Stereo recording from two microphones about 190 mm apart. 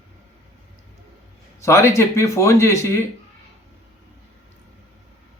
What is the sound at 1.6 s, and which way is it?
Speech, 15° left (ahead or behind).